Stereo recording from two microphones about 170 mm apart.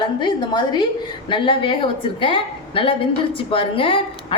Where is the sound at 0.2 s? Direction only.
25° left (ahead or behind).